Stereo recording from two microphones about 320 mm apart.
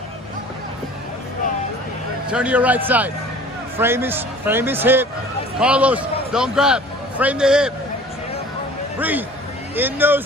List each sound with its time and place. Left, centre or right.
2.3 s a man's voice: centre
9.8 s speech: centre